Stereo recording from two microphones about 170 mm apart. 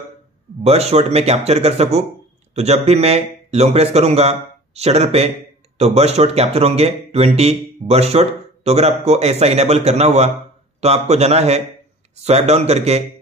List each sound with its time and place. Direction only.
0.7 s speech: 40° right (ahead or behind)